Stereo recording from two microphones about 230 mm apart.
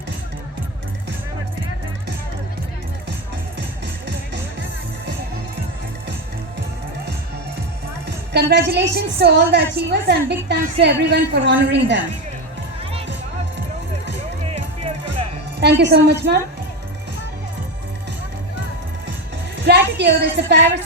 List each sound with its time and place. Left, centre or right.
8.0 s a woman's voice: right
15.8 s a woman's voice: right
19.6 s a woman's voice: right